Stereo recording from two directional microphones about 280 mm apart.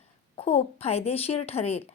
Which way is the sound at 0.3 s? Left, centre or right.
Left.